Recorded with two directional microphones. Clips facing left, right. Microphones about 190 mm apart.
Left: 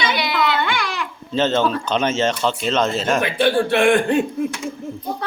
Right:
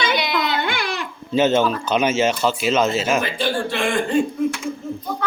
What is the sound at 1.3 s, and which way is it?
Speech, 10° right (ahead or behind).